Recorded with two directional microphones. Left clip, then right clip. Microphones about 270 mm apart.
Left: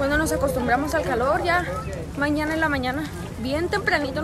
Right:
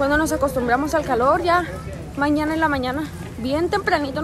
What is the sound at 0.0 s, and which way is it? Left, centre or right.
Speech, centre.